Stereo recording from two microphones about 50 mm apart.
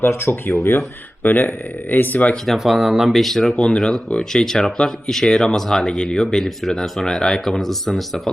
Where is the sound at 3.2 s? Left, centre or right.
Centre.